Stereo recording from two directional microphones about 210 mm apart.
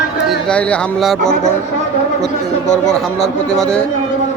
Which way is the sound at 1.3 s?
35° left (ahead or behind).